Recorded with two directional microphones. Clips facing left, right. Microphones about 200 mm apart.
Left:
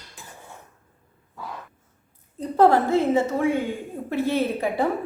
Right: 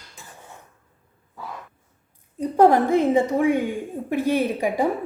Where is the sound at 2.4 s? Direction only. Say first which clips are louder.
Right 2 dB; 15° right (ahead or behind).